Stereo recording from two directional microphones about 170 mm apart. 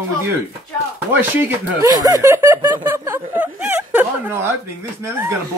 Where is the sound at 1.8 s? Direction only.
20° right (ahead or behind).